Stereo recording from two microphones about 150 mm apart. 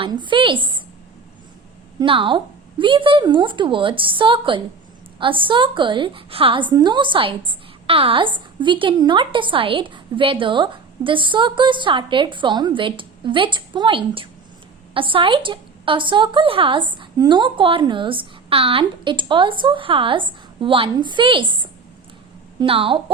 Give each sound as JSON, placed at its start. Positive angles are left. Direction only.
{"t": 0.0, "sound": "a woman's voice", "side_deg": -30}
{"t": 2.0, "sound": "a woman's voice", "side_deg": -35}